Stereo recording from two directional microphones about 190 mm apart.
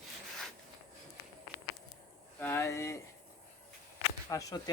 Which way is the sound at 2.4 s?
10° left (ahead or behind).